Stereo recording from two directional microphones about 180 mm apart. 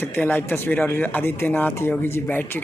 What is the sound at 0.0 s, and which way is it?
Speech, 10° left (ahead or behind).